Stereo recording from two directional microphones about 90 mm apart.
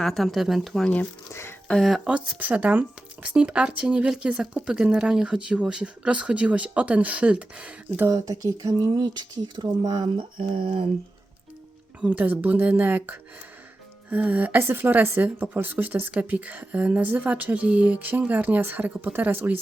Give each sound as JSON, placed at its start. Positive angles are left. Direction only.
{"t": 0.0, "sound": "speech", "side_deg": 5}
{"t": 1.3, "sound": "speech", "side_deg": 30}
{"t": 1.6, "sound": "speech", "side_deg": 5}
{"t": 2.0, "sound": "speech", "side_deg": -15}
{"t": 8.1, "sound": "speech", "side_deg": -40}
{"t": 11.9, "sound": "a woman's voice", "side_deg": -15}